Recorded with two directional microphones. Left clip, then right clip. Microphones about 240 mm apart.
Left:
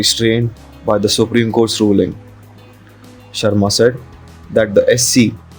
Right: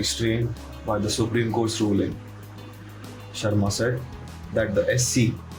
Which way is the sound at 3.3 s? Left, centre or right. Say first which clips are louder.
Left 12 dB; left.